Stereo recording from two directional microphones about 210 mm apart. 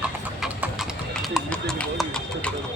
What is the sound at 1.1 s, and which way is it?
Clip-clop, 5° left (ahead or behind).